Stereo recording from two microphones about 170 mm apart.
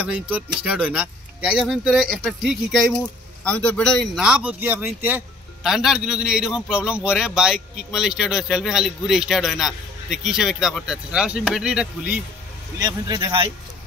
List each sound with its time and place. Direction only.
0.0 s a man's voice: 10° right (ahead or behind)
12.7 s speech: 20° right (ahead or behind)